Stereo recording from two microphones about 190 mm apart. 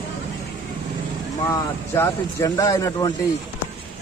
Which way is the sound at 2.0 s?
15° left (ahead or behind).